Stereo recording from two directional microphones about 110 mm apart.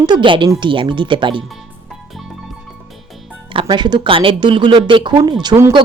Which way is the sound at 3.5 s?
50° right (ahead or behind).